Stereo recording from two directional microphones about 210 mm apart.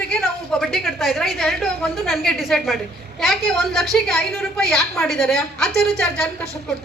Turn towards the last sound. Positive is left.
turn(degrees=5)  # may be behind; listen again after turning